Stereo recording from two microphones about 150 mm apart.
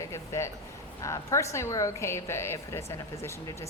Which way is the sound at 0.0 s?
20° left (ahead or behind).